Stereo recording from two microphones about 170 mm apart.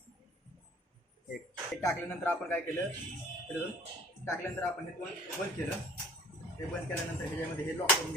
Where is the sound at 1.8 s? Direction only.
15° left (ahead or behind).